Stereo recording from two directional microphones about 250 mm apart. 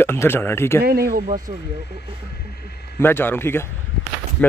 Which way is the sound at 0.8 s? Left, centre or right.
Right.